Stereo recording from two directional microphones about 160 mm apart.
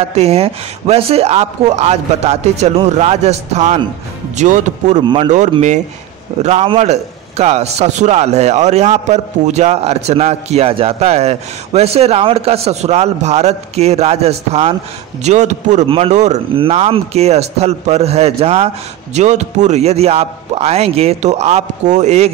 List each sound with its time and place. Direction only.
0.1 s a man's voice: 40° right (ahead or behind)
5.0 s a man's voice: 30° right (ahead or behind)
6.4 s a man's voice: 40° right (ahead or behind)